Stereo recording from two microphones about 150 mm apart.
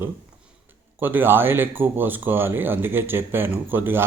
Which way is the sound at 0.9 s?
15° right (ahead or behind).